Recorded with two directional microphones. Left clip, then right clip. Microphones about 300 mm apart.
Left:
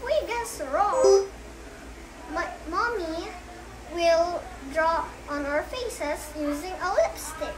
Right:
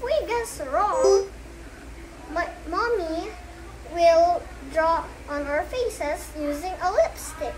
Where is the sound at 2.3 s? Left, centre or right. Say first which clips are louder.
Right 2 dB; centre.